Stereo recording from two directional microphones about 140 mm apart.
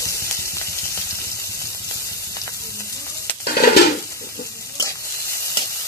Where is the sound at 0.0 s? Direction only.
20° left (ahead or behind).